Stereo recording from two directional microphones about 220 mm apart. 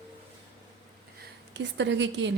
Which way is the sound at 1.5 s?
55° right (ahead or behind).